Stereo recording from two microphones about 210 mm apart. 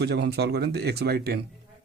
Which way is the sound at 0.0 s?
50° right (ahead or behind).